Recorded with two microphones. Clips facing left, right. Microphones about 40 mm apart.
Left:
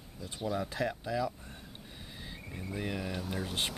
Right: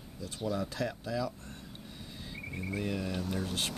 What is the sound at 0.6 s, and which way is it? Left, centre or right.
Speech, centre.